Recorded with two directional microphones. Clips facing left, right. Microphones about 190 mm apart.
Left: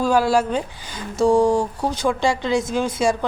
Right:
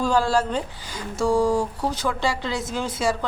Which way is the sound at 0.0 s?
10° left (ahead or behind).